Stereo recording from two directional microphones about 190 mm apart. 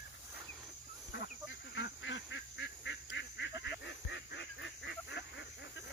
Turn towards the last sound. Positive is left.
turn(degrees=65)  # may be behind; listen again after turning